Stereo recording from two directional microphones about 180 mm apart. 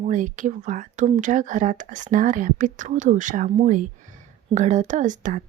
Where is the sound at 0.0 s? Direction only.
45° right (ahead or behind).